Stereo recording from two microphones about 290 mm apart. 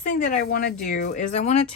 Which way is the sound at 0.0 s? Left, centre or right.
Left.